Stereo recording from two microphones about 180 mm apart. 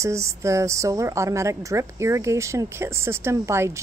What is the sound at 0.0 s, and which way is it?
A woman's voice, 15° right (ahead or behind).